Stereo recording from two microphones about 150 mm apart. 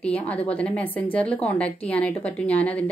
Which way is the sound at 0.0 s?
10° left (ahead or behind).